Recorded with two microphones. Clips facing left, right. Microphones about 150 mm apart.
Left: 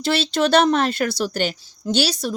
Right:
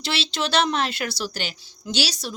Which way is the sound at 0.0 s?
50° left (ahead or behind).